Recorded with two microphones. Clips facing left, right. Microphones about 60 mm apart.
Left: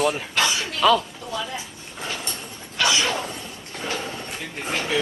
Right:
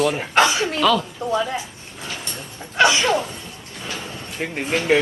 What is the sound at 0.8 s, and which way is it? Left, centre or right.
Speech, centre.